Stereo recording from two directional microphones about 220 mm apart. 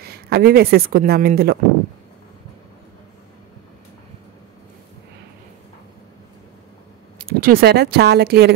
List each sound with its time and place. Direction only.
0.0 s speech: 45° right (ahead or behind)
7.2 s speech: 40° right (ahead or behind)